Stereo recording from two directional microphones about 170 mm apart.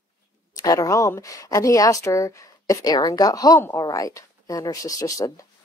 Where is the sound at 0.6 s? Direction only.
20° left (ahead or behind).